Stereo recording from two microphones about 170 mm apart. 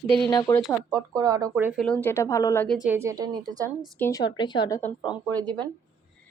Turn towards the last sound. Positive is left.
turn(degrees=-25)  # may be behind; listen again after turning